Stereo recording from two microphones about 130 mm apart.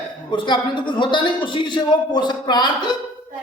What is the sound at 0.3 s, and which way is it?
A man's voice, 35° left (ahead or behind).